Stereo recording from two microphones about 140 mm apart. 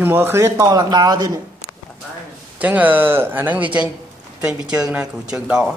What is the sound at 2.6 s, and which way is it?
Speech, 10° right (ahead or behind).